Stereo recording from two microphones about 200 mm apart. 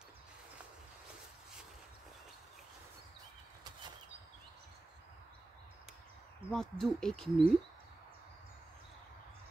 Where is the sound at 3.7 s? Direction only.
20° right (ahead or behind).